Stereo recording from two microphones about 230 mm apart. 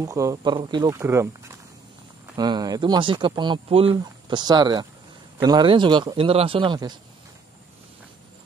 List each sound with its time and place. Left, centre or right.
0.0 s speech: centre